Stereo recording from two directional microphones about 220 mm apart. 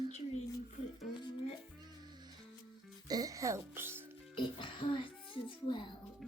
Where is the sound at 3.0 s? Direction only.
15° right (ahead or behind).